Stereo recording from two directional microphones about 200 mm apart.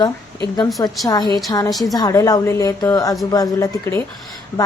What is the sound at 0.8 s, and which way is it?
Speech, 20° left (ahead or behind).